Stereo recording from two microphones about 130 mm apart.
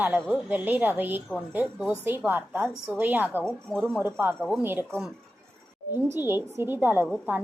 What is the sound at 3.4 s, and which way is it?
Speech, 5° left (ahead or behind).